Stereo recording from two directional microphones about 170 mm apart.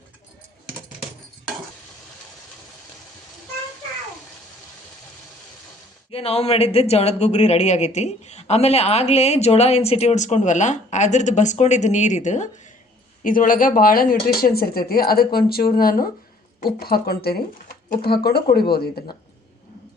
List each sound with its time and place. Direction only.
6.1 s speech: 35° left (ahead or behind); by 19.1 s 65° left (ahead or behind)